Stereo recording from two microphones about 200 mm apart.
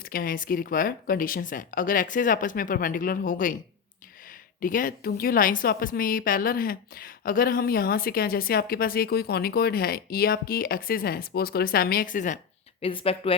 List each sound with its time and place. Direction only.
0.0 s a woman's voice: 45° left (ahead or behind)
4.6 s a woman's voice: 45° left (ahead or behind)
12.8 s speech: 25° left (ahead or behind)